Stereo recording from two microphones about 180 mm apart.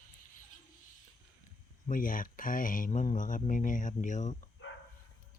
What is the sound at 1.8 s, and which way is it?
Speech, 50° left (ahead or behind).